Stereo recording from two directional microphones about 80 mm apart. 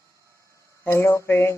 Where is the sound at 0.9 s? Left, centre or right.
Left.